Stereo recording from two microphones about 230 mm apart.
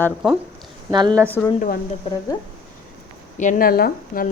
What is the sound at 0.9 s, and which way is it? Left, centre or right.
Speech, centre.